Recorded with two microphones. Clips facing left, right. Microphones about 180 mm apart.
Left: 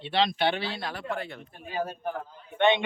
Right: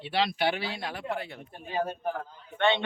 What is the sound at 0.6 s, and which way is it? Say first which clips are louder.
Speech: left 1 dB; 35° left (ahead or behind).